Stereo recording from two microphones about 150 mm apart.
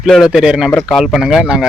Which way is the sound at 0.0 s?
5° right (ahead or behind).